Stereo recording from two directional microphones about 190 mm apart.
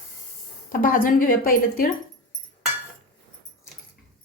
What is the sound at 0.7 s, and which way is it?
A woman's voice, 45° left (ahead or behind).